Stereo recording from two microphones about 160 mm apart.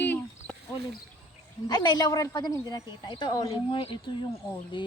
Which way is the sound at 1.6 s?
25° left (ahead or behind).